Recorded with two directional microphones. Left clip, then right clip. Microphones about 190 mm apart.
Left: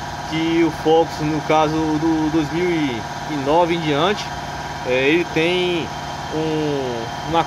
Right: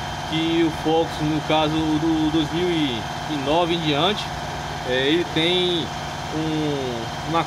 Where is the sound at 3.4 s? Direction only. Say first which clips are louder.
Left 4 dB; 15° left (ahead or behind).